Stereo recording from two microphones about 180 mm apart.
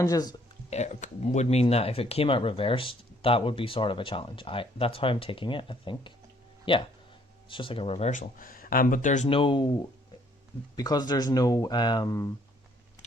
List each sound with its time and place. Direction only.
0.0 s speech: 20° left (ahead or behind)
0.7 s speech: 40° left (ahead or behind)
10.8 s speech: 20° left (ahead or behind)